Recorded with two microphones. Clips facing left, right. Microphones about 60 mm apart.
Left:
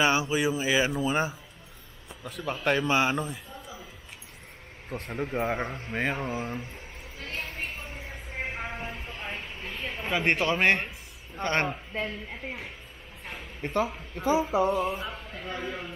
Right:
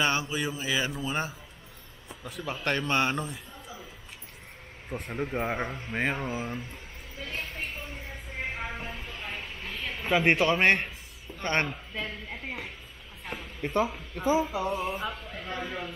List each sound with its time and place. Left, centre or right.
0.0 s speech: centre
2.2 s a man's voice: centre
4.8 s speech: centre
7.3 s a sound: centre
9.0 s a sound: left
10.1 s speech: centre
11.6 s a man's voice: left
12.1 s speech: centre